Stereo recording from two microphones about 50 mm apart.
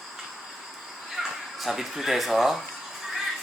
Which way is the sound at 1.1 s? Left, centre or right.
Centre.